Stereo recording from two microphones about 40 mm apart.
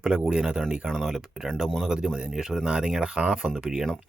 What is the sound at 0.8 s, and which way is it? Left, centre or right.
Speech, centre.